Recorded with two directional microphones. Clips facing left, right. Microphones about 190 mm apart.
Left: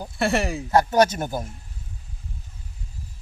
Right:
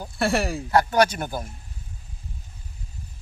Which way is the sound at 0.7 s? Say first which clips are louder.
Left 2 dB; 20° left (ahead or behind).